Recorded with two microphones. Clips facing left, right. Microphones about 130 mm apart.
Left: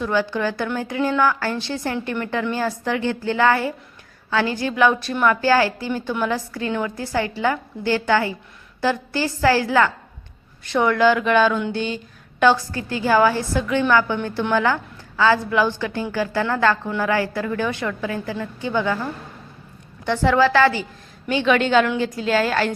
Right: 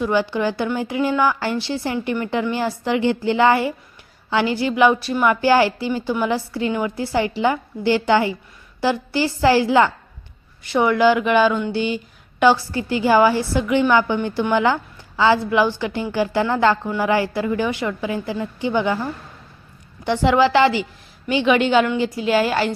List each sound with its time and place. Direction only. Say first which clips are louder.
0.0 s a woman's voice: right 2 dB; 15° right (ahead or behind)